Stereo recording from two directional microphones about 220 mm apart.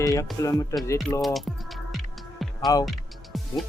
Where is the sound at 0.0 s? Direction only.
15° left (ahead or behind).